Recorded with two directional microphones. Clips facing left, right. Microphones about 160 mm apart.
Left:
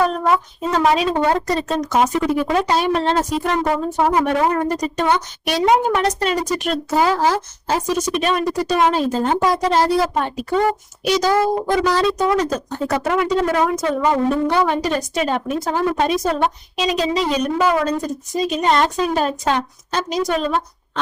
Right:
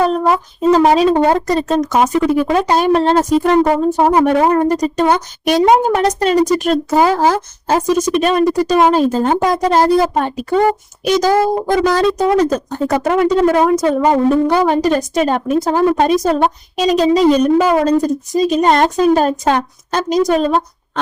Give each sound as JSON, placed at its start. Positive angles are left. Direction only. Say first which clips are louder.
{"t": 0.0, "sound": "a woman's voice", "louder": "right 4 dB", "side_deg": -30}